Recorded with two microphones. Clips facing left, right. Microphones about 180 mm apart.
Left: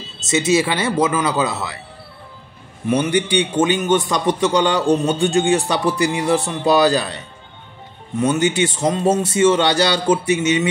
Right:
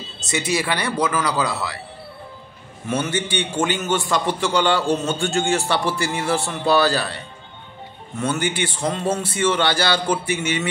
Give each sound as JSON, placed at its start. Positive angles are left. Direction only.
{"t": 0.3, "sound": "a man's voice", "side_deg": 25}
{"t": 2.9, "sound": "a man's voice", "side_deg": 15}
{"t": 8.2, "sound": "a man's voice", "side_deg": 20}